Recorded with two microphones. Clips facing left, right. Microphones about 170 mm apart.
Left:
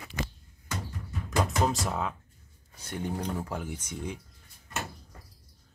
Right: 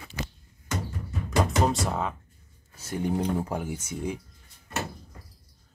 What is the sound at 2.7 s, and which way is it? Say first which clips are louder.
Speech: right 6 dB; 5° right (ahead or behind).